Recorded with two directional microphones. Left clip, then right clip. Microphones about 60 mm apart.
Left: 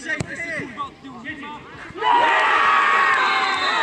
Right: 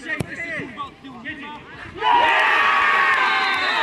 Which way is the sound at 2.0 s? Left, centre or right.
Right.